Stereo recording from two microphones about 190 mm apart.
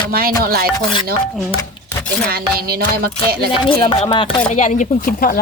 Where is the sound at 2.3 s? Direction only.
55° right (ahead or behind).